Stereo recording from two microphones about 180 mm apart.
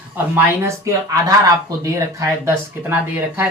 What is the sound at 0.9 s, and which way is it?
Speech, 15° right (ahead or behind).